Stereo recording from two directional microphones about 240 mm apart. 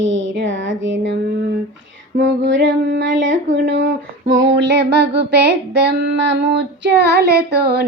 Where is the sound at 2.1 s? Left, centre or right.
Right.